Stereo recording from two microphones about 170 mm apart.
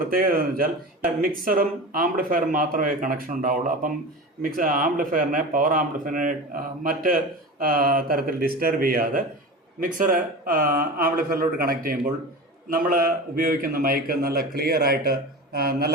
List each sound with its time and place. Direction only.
0.1 s a man's voice: 60° right (ahead or behind)